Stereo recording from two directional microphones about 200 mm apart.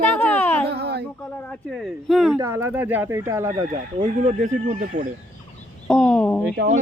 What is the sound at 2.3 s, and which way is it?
Speech, 15° right (ahead or behind).